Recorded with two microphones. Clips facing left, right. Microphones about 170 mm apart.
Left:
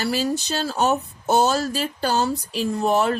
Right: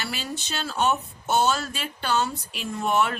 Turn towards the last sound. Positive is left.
turn(degrees=35)  # may be behind; listen again after turning